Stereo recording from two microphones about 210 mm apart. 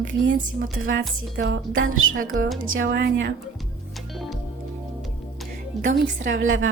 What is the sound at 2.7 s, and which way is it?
Speech, 60° right (ahead or behind).